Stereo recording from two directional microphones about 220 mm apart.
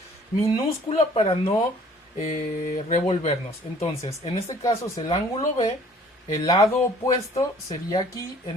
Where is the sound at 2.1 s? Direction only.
30° left (ahead or behind).